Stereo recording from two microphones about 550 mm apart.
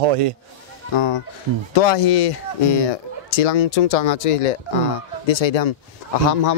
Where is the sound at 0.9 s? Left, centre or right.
Left.